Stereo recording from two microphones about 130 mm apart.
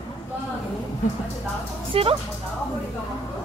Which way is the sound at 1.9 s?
45° right (ahead or behind).